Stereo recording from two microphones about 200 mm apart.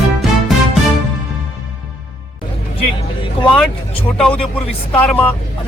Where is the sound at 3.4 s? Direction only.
25° left (ahead or behind).